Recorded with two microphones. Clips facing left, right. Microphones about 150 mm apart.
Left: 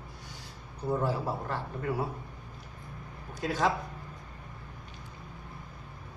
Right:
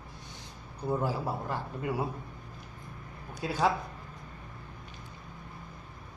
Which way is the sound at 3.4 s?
10° right (ahead or behind).